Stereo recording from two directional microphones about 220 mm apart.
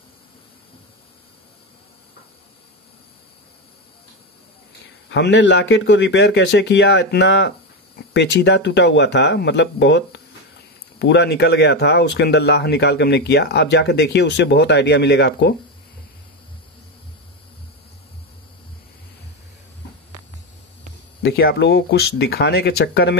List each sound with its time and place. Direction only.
5.1 s speech: 55° left (ahead or behind)
21.2 s speech: 45° left (ahead or behind)